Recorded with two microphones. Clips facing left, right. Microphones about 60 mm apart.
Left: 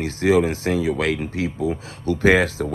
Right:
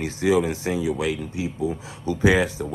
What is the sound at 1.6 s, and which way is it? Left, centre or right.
Speech, left.